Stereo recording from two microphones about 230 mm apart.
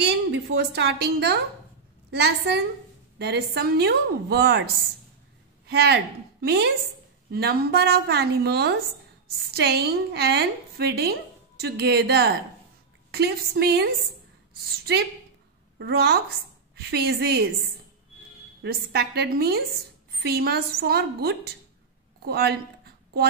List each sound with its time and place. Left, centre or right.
0.0 s a woman's voice: right
5.7 s a woman's voice: right
15.8 s a woman's voice: right
18.6 s a woman's voice: right